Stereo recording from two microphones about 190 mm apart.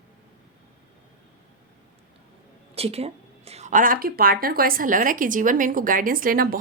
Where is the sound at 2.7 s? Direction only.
30° right (ahead or behind); by 6.6 s 50° right (ahead or behind).